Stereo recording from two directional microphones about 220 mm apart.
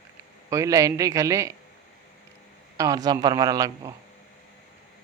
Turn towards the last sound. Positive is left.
turn(degrees=-15)  # may be behind; listen again after turning